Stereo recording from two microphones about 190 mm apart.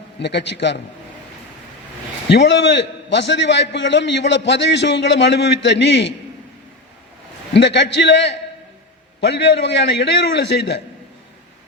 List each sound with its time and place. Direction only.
0.2 s a man's voice: 65° left (ahead or behind)
2.3 s a man's voice: 65° left (ahead or behind)
7.5 s a man's voice: 65° left (ahead or behind)